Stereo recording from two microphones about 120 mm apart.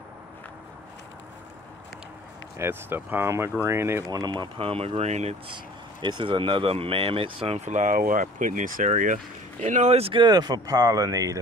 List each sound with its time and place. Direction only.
2.5 s speech: 20° right (ahead or behind)
4.1 s speech: 35° right (ahead or behind); by 5.3 s 65° right (ahead or behind)
5.5 s speech: 40° right (ahead or behind)
7.5 s speech: 85° right; by 11.3 s 30° right (ahead or behind)